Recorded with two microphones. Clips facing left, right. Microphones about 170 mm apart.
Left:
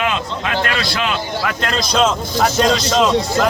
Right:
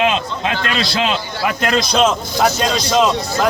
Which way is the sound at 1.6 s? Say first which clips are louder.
Right 3 dB; centre (ahead or behind).